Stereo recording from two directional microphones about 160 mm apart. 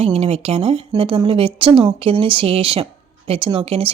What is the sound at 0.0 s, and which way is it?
Speech, 35° right (ahead or behind).